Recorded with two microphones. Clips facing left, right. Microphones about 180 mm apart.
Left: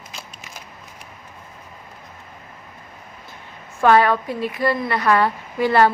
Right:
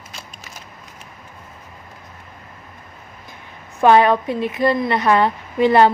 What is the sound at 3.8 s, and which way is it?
A woman's voice, 20° right (ahead or behind).